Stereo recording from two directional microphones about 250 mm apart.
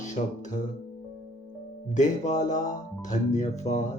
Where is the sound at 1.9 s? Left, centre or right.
Left.